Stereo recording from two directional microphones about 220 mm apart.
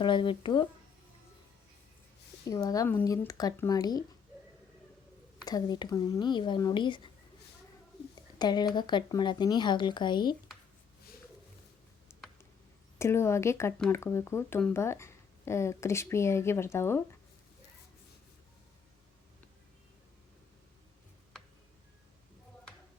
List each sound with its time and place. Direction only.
0.0 s speech: 20° left (ahead or behind)
2.4 s speech: 15° left (ahead or behind)
5.5 s speech: 20° left (ahead or behind)
8.4 s speech: 20° left (ahead or behind)
13.0 s speech: 10° left (ahead or behind)